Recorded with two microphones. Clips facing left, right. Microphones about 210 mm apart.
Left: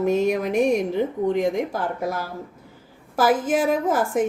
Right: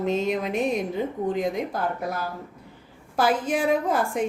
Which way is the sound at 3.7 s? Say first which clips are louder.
Left 2 dB; 45° left (ahead or behind).